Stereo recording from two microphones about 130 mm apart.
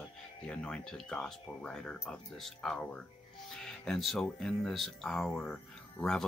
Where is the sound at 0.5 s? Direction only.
5° left (ahead or behind).